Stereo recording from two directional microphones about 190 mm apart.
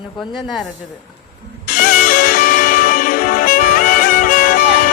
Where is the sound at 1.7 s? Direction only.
50° left (ahead or behind).